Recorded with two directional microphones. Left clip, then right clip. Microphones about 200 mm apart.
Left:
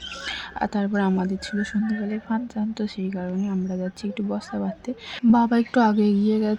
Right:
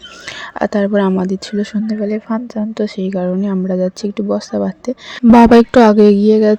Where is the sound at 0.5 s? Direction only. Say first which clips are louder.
Right 12 dB; 30° right (ahead or behind).